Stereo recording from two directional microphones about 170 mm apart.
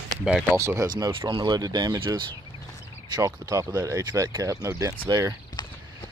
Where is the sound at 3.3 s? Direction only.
20° right (ahead or behind).